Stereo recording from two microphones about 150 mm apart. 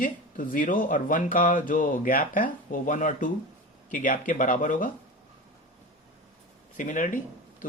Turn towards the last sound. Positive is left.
turn(degrees=60)  # may be behind; listen again after turning